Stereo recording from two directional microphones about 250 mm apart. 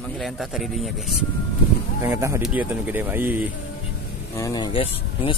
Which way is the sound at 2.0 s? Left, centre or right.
Centre.